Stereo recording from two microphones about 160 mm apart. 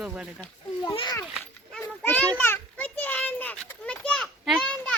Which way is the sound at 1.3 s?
5° left (ahead or behind).